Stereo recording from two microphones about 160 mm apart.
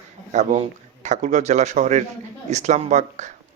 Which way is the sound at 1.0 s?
50° right (ahead or behind).